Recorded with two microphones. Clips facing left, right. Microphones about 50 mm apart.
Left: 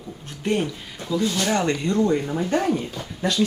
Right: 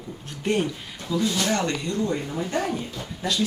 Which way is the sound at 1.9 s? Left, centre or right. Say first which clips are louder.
Left 6 dB; left.